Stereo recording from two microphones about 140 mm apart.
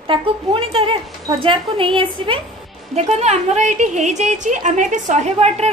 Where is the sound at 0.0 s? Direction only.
40° right (ahead or behind).